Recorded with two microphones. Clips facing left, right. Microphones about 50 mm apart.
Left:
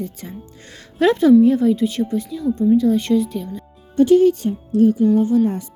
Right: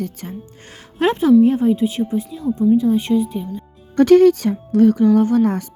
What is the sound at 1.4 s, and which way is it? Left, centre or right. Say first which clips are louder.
Speech: even; right.